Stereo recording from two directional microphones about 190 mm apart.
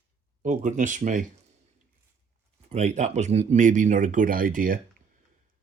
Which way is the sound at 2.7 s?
35° right (ahead or behind).